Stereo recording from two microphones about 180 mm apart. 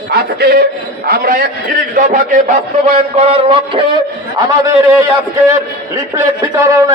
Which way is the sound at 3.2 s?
30° right (ahead or behind).